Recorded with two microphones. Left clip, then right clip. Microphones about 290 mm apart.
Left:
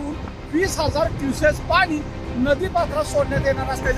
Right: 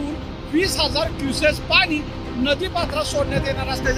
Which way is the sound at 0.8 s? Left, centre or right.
Left.